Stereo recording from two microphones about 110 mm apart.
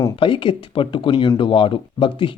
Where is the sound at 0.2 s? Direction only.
50° left (ahead or behind).